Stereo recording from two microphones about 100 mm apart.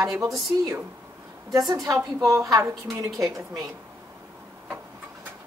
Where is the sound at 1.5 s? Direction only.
35° right (ahead or behind).